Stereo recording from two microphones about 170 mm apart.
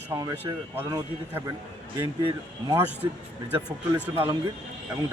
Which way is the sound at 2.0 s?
25° right (ahead or behind).